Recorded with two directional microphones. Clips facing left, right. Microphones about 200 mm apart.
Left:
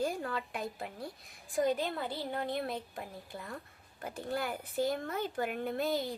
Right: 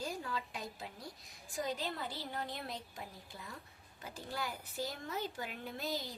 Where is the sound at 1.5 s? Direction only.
55° left (ahead or behind).